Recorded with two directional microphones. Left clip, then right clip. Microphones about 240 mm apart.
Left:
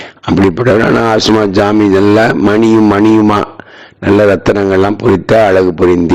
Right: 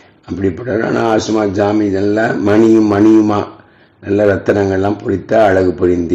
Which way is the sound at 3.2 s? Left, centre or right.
Left.